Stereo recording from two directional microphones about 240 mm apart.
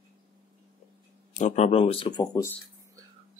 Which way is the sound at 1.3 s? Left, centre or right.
Left.